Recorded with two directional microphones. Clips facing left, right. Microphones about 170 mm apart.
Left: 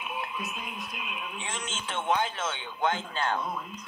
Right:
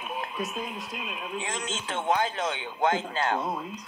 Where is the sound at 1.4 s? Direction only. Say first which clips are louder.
Right 4 dB; 40° right (ahead or behind).